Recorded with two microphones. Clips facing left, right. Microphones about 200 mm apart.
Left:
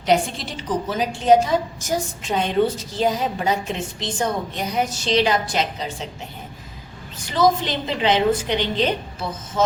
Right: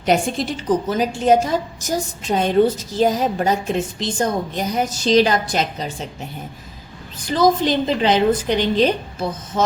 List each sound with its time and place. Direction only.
0.0 s a woman's voice: 50° right (ahead or behind)
7.3 s a woman's voice: 40° right (ahead or behind)